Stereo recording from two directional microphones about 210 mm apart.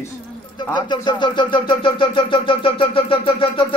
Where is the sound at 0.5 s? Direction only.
20° left (ahead or behind).